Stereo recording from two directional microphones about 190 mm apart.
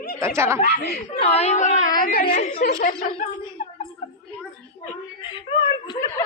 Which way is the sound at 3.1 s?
35° left (ahead or behind).